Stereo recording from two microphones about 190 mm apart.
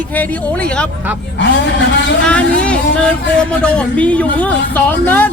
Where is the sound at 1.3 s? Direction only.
65° left (ahead or behind).